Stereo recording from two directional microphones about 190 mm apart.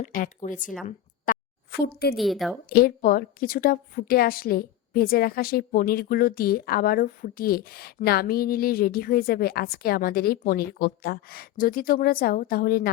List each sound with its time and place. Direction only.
0.0 s a woman's voice: 45° left (ahead or behind)
0.9 s a sound: 45° left (ahead or behind)
2.1 s a woman's voice: centre (ahead or behind)
2.6 s a woman's voice: 55° left (ahead or behind)